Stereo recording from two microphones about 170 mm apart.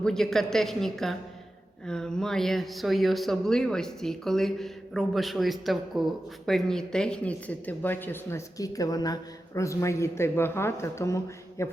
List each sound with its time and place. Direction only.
0.0 s a man's voice: 5° left (ahead or behind)